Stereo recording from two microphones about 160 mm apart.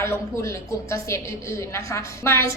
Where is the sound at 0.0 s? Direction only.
15° left (ahead or behind).